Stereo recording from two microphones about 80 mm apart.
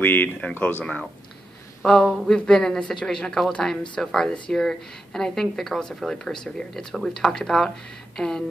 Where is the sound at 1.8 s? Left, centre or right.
Centre.